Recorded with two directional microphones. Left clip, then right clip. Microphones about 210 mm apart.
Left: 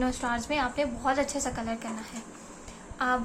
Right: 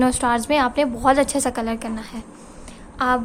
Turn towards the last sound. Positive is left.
turn(degrees=-50)  # may be behind; listen again after turning